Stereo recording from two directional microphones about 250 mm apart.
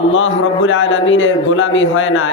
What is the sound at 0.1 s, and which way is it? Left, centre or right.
A man's voice, left.